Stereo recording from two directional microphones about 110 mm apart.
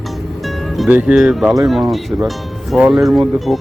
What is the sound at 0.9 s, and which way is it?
Speech, 10° right (ahead or behind).